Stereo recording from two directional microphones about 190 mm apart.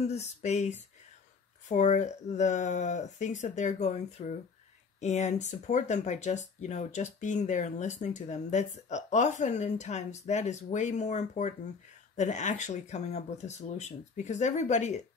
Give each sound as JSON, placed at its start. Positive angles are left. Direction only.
{"t": 0.0, "sound": "speech", "side_deg": 35}